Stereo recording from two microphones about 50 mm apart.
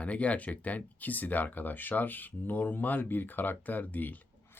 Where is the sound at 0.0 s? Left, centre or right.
Left.